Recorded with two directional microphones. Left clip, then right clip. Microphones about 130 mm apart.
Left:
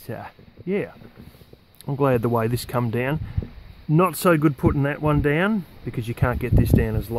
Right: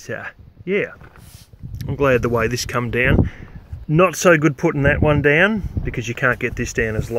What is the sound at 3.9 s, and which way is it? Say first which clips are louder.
Speech: right 5 dB; 20° left (ahead or behind).